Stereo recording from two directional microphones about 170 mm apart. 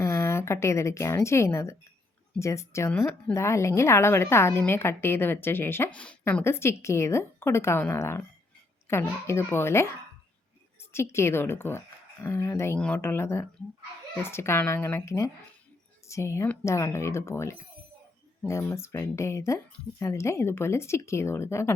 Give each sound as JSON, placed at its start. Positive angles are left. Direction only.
{"t": 0.0, "sound": "a woman's voice", "side_deg": 15}